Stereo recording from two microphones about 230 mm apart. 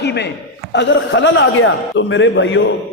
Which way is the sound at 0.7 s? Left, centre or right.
Left.